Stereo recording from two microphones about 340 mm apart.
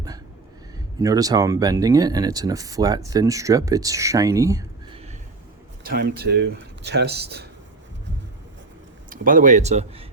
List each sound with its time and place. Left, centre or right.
1.0 s speech: centre
5.8 s speech: right
9.0 s speech: right